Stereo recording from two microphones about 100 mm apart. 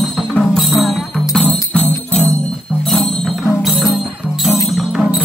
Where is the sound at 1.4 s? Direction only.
15° left (ahead or behind).